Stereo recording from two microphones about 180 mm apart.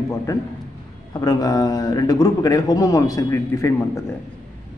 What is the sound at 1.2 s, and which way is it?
A man's voice, 20° left (ahead or behind).